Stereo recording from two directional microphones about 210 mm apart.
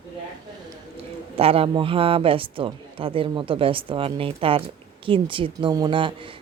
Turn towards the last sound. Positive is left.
turn(degrees=-25)  # may be behind; listen again after turning